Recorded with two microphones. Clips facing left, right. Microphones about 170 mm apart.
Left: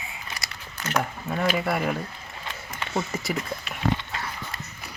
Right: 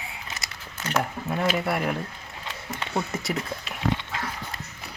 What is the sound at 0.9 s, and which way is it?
Speech, 5° right (ahead or behind).